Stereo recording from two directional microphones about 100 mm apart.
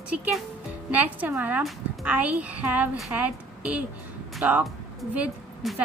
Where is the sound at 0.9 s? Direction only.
15° right (ahead or behind).